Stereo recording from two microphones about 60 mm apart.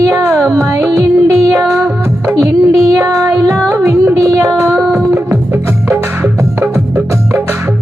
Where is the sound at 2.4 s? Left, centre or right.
Right.